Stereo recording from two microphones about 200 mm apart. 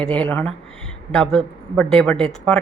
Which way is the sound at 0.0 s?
5° left (ahead or behind).